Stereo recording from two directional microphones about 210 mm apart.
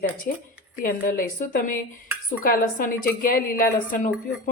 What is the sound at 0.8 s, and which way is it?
A woman's voice, 40° left (ahead or behind).